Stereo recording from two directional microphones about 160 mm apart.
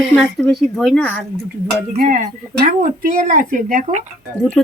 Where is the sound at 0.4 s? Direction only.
Centre (ahead or behind).